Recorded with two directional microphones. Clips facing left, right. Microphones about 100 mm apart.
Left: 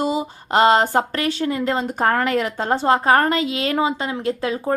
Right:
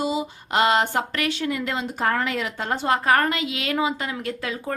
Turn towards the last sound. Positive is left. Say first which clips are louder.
# left 7 dB
turn(degrees=30)  # may be behind; listen again after turning